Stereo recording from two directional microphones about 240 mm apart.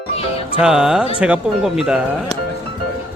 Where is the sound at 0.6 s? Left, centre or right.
Centre.